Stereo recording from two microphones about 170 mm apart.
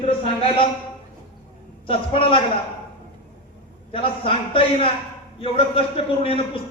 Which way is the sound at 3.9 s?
30° left (ahead or behind).